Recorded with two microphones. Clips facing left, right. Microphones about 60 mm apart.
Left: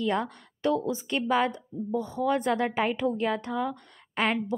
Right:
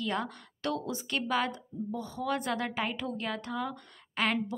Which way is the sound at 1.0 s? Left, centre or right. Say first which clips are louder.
Left 4 dB; left.